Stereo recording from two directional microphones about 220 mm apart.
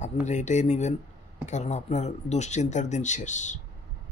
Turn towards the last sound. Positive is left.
turn(degrees=35)  # may be behind; listen again after turning